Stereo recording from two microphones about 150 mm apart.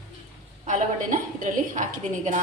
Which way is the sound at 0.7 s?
60° right (ahead or behind).